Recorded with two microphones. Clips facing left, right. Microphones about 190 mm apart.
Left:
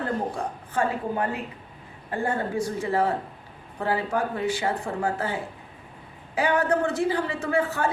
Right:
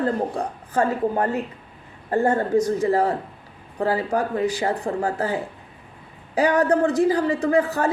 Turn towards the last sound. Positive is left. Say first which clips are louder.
# right 5 dB
turn(degrees=-40)  # may be behind; listen again after turning